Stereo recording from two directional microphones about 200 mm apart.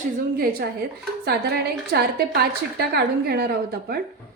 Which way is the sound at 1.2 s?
55° right (ahead or behind).